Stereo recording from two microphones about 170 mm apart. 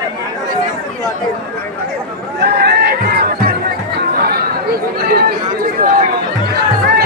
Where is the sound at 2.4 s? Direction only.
70° right (ahead or behind).